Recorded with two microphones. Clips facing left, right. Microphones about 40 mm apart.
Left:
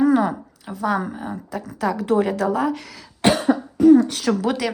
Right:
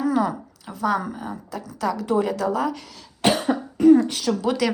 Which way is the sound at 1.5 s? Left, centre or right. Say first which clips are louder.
Left 2 dB; left.